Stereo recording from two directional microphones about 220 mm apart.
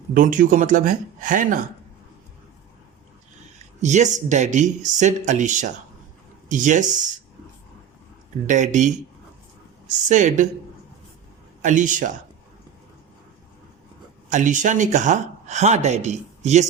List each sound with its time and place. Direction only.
0.1 s speech: 35° right (ahead or behind)
3.8 s speech: 30° right (ahead or behind)
8.4 s speech: 35° right (ahead or behind)
10.1 s speech: 35° right (ahead or behind)
11.6 s speech: 35° right (ahead or behind)
14.3 s speech: 35° right (ahead or behind)